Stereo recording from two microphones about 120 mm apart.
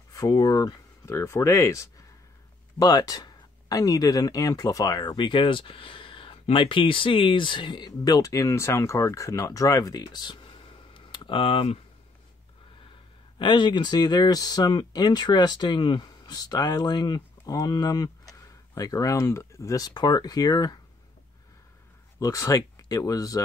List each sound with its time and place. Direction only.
0.1 s speech: 30° left (ahead or behind); by 11.8 s 50° left (ahead or behind)
13.4 s speech: 40° left (ahead or behind)
22.2 s speech: 30° left (ahead or behind)